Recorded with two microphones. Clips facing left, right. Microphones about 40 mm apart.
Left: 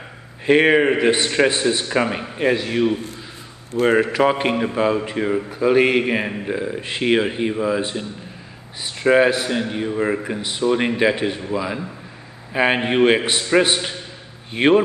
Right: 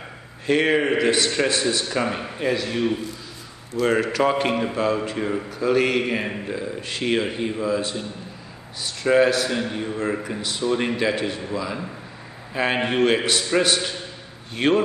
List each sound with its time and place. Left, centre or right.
0.5 s a man's voice: left
2.9 s a man's voice: left
3.8 s a man's voice: centre
9.0 s a man's voice: left